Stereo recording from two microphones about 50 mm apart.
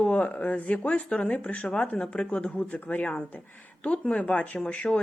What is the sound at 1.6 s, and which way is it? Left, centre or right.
Speech, centre.